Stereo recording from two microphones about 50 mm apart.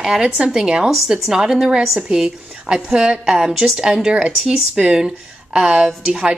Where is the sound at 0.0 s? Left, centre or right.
Centre.